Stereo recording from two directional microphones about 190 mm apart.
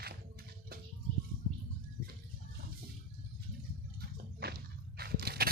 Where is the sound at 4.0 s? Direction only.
55° right (ahead or behind).